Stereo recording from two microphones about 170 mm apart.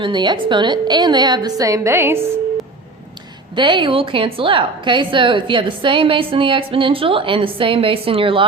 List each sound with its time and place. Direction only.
0.0 s a woman's voice: 25° right (ahead or behind)
3.5 s a woman's voice: 30° right (ahead or behind)